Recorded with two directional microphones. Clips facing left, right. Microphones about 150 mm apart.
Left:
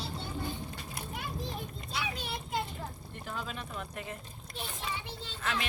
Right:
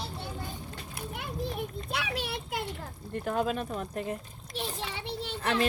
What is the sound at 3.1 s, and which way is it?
Speech, 55° right (ahead or behind).